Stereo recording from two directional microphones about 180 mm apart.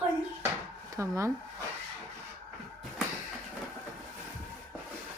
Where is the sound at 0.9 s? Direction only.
15° right (ahead or behind).